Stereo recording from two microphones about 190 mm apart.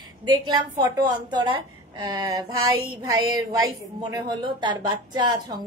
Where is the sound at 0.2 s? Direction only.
20° right (ahead or behind).